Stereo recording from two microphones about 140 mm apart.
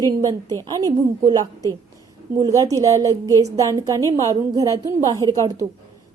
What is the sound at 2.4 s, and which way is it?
A woman's voice, 25° right (ahead or behind).